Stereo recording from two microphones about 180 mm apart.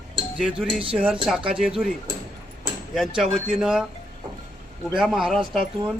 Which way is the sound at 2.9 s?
Centre (ahead or behind).